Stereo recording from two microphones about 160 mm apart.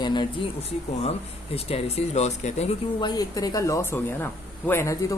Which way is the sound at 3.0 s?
25° left (ahead or behind).